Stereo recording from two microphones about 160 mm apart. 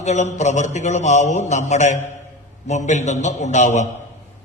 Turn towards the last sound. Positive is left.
turn(degrees=45)  # may be behind; listen again after turning